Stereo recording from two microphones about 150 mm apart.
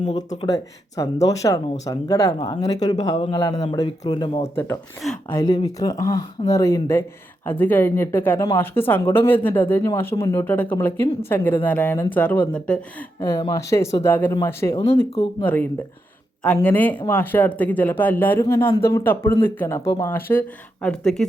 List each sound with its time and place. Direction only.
0.0 s speech: 30° left (ahead or behind)
4.4 s speech: 15° left (ahead or behind)
13.1 s speech: 20° left (ahead or behind)
15.1 s speech: 35° left (ahead or behind)
15.4 s speech: 10° left (ahead or behind)